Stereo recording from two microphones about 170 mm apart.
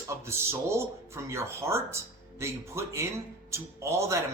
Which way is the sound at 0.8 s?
15° right (ahead or behind).